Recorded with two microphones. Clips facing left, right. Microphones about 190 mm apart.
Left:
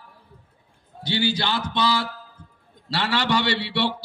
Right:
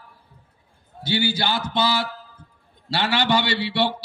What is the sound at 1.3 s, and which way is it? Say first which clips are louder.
A man's voice: right 1 dB; 25° right (ahead or behind).